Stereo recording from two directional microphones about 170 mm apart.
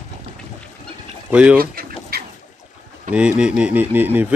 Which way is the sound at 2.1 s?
65° right (ahead or behind).